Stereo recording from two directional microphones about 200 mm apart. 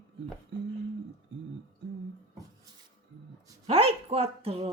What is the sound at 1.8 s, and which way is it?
Beatboxing, 60° right (ahead or behind).